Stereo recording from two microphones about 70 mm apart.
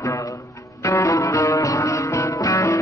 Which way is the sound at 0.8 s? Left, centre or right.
Left.